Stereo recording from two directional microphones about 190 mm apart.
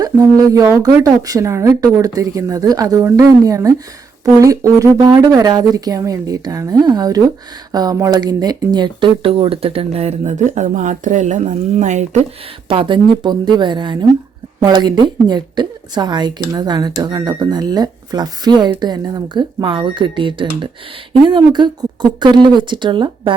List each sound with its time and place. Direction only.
0.0 s a woman's voice: 20° right (ahead or behind); by 12.2 s 40° right (ahead or behind)
12.6 s speech: 25° right (ahead or behind)